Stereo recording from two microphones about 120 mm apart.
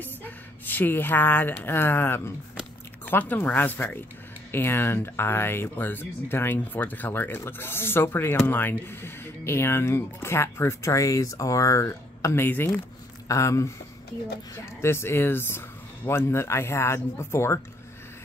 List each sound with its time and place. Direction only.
0.0 s a woman's voice: 15° left (ahead or behind)